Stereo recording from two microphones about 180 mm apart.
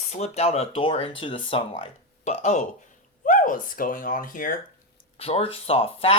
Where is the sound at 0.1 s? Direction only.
35° left (ahead or behind).